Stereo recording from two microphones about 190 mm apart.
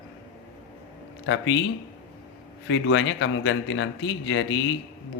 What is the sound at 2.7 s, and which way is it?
Speech, 80° left.